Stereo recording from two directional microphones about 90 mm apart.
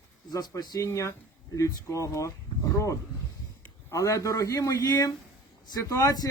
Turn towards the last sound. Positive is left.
turn(degrees=45)  # may be behind; listen again after turning